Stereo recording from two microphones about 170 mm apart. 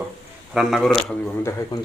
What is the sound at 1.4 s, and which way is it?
Speech, 15° left (ahead or behind).